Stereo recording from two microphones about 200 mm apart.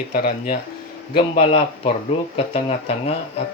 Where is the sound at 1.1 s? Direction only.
30° left (ahead or behind).